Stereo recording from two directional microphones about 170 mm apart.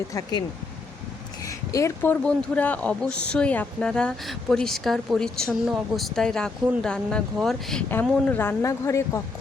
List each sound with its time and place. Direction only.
0.1 s speech: 20° left (ahead or behind)
1.5 s a sound: 20° left (ahead or behind)
2.2 s a woman's voice: 10° left (ahead or behind)